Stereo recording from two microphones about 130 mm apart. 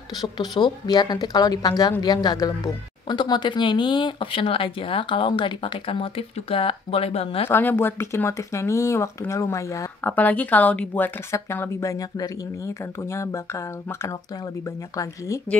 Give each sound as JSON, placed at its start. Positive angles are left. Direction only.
{"t": 0.2, "sound": "a woman's voice", "side_deg": 30}
{"t": 7.4, "sound": "a woman's voice", "side_deg": 15}
{"t": 10.0, "sound": "a woman's voice", "side_deg": 10}